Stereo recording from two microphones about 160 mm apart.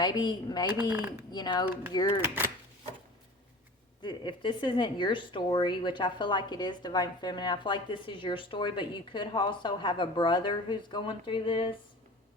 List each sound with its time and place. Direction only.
0.0 s speech: 25° left (ahead or behind)
2.2 s speech: 15° right (ahead or behind)
4.0 s speech: 30° left (ahead or behind)